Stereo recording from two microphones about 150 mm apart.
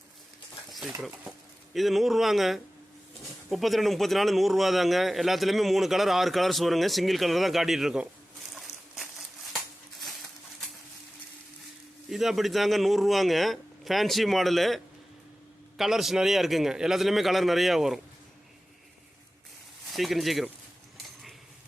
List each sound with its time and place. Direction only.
0.7 s stir: centre (ahead or behind)
1.7 s a man's voice: centre (ahead or behind)
8.5 s a sound: centre (ahead or behind)
12.1 s a man's voice: centre (ahead or behind)
15.8 s a man's voice: centre (ahead or behind)
19.9 s a man's voice: centre (ahead or behind)